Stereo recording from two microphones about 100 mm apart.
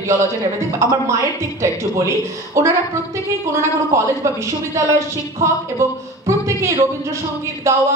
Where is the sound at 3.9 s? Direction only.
30° right (ahead or behind).